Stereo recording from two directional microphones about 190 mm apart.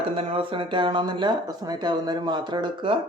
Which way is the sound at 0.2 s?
30° right (ahead or behind).